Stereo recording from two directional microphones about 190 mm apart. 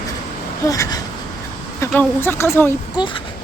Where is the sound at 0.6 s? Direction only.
15° left (ahead or behind).